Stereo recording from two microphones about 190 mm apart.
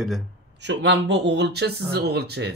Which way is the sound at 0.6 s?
70° right (ahead or behind).